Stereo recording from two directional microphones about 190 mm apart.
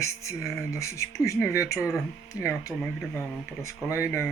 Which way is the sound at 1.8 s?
5° right (ahead or behind).